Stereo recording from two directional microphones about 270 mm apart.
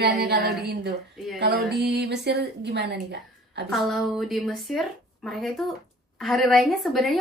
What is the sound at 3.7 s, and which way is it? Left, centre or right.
A woman's voice, centre.